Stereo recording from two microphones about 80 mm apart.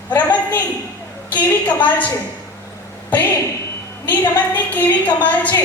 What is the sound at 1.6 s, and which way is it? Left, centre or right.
Speech, centre.